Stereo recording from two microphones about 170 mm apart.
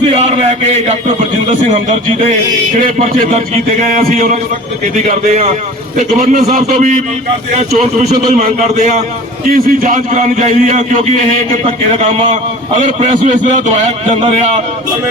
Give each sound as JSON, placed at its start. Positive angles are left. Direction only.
{"t": 0.1, "sound": "a man's voice", "side_deg": -40}
{"t": 5.3, "sound": "a man's voice", "side_deg": -45}
{"t": 6.1, "sound": "a man's voice", "side_deg": -55}
{"t": 11.6, "sound": "a man's voice", "side_deg": -35}